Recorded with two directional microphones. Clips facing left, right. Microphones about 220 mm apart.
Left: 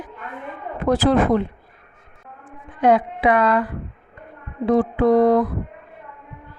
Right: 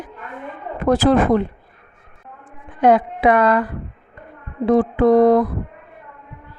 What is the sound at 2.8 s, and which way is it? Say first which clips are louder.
Speech: right 2 dB; 50° right (ahead or behind).